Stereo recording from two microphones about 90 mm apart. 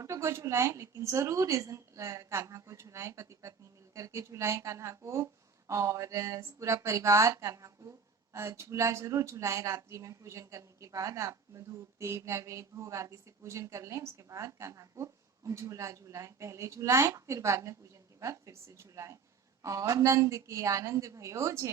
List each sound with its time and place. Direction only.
0.0 s speech: 35° right (ahead or behind)